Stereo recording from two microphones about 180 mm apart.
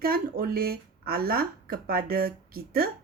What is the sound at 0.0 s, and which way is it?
Speech, 55° right (ahead or behind).